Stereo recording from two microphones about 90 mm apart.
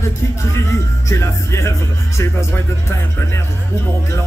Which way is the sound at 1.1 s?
30° left (ahead or behind).